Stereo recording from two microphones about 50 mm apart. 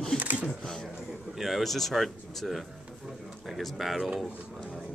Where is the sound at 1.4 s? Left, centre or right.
Centre.